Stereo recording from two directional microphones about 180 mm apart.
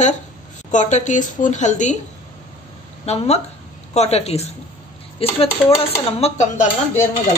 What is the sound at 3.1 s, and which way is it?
Speech, 35° left (ahead or behind).